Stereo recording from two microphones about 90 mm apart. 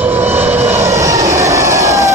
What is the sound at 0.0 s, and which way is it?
Vehicle, 25° right (ahead or behind).